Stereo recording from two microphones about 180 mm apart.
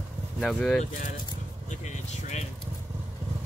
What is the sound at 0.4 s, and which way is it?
Speech, centre (ahead or behind).